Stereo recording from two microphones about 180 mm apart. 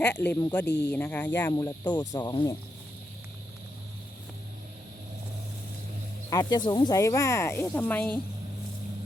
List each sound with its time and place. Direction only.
0.0 s speech: 10° left (ahead or behind)
6.3 s speech: 20° left (ahead or behind)